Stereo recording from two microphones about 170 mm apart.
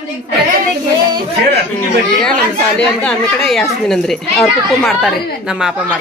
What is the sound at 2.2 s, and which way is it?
Speech, 5° left (ahead or behind).